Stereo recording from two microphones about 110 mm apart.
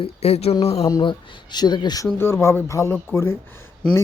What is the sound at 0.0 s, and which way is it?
Speech, 70° left (ahead or behind).